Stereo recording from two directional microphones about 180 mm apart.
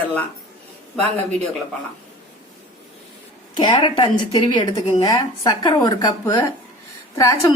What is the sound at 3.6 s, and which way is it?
A woman's voice, 25° left (ahead or behind).